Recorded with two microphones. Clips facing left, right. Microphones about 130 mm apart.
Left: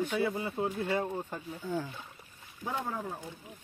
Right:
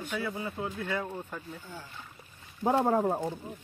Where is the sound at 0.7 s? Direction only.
30° left (ahead or behind).